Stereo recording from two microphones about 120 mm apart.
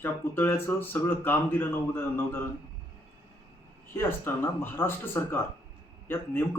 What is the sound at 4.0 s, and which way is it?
Speech, 20° left (ahead or behind).